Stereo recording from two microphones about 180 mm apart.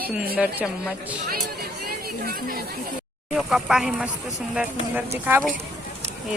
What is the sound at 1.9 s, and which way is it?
Speech, 55° right (ahead or behind).